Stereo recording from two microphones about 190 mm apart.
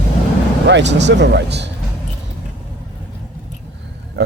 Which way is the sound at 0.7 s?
65° right (ahead or behind).